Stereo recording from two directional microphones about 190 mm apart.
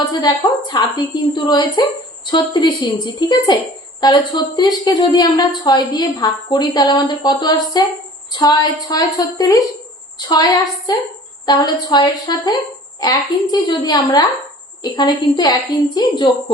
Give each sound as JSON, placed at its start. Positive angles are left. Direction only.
{"t": 0.1, "sound": "a woman's voice", "side_deg": 20}